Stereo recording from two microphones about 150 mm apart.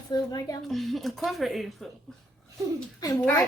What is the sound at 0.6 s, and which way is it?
Speech, centre (ahead or behind).